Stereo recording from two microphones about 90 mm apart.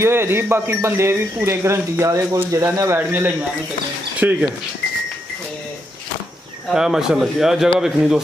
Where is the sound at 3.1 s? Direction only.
25° right (ahead or behind).